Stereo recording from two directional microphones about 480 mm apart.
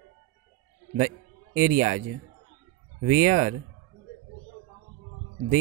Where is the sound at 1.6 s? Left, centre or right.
Centre.